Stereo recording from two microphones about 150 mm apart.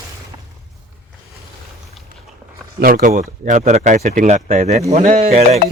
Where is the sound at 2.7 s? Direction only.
80° right; by 4.8 s 55° right (ahead or behind).